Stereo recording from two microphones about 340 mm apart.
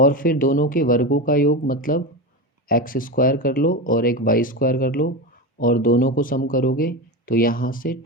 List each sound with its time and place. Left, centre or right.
0.0 s speech: left